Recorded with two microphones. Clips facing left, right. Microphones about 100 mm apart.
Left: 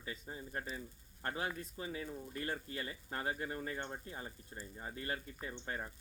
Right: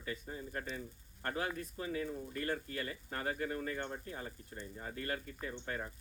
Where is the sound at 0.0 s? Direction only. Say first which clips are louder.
Right 3 dB; 25° left (ahead or behind).